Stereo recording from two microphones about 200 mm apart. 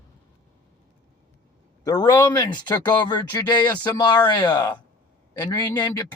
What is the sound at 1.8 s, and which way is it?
Speech, 20° left (ahead or behind).